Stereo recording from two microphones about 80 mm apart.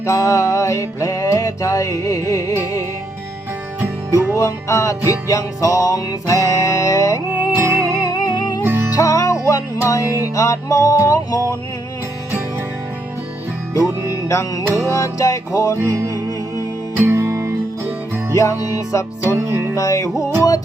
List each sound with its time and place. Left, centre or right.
0.0 s music: left
3.8 s music: right
4.4 s music: left
7.5 s music: right
8.0 s music: left
8.6 s music: right
9.0 s music: left
14.1 s music: left
15.9 s music: right
17.0 s music: right
18.3 s music: left
19.5 s music: right
19.7 s music: left